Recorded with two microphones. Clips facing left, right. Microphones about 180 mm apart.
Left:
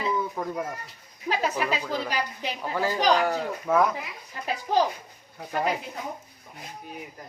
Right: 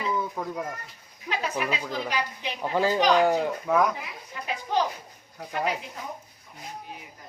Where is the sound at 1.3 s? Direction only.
25° left (ahead or behind).